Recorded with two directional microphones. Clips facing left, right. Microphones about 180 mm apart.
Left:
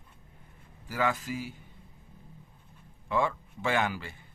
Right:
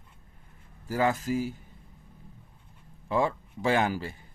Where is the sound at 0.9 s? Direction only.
40° right (ahead or behind).